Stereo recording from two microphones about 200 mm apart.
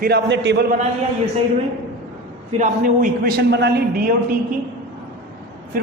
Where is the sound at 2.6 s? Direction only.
45° right (ahead or behind).